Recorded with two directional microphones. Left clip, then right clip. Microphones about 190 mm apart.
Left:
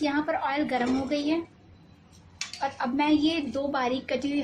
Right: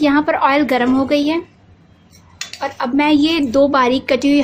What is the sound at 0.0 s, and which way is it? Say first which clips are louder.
Speech: right 13 dB; 50° right (ahead or behind).